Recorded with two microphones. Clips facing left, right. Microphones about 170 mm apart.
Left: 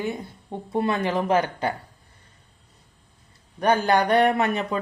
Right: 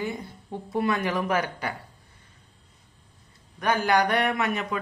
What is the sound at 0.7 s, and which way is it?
Speech, 25° left (ahead or behind).